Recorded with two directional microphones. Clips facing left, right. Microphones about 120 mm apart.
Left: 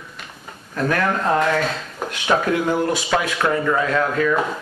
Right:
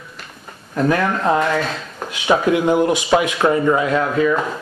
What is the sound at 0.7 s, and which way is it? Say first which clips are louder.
Speech: right 3 dB; 15° right (ahead or behind).